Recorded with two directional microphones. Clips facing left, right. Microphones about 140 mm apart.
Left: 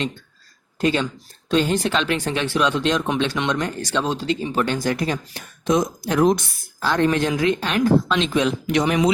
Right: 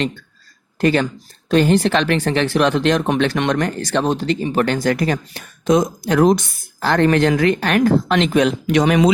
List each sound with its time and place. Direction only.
0.8 s speech: 60° right (ahead or behind); by 6.3 s 80° right
6.7 s speech: 65° right (ahead or behind)